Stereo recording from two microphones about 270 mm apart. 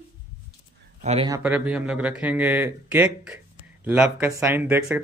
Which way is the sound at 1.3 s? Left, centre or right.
Centre.